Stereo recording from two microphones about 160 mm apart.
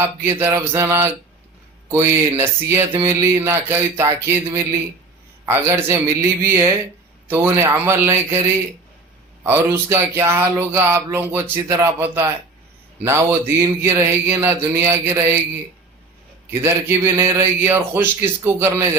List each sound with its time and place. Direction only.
0.0 s speech: 15° right (ahead or behind)
9.4 s speech: 15° right (ahead or behind)
16.5 s speech: 15° right (ahead or behind)